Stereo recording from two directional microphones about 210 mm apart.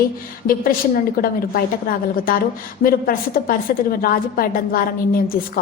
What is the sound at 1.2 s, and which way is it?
A woman's voice, 45° left (ahead or behind).